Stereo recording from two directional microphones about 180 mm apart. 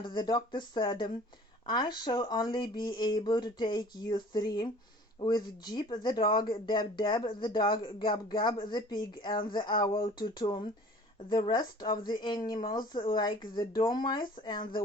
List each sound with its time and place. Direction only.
0.0 s speech: 25° left (ahead or behind)